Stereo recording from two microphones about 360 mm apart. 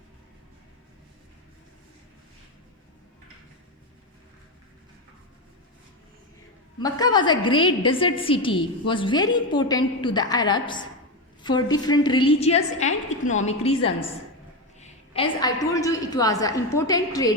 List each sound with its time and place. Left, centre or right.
6.7 s a woman's voice: centre